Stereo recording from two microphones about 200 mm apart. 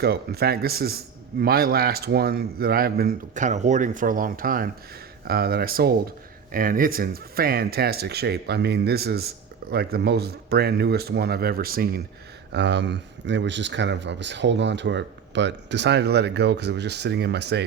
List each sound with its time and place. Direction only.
0.0 s speech: 50° right (ahead or behind)
12.5 s speech: 60° right (ahead or behind)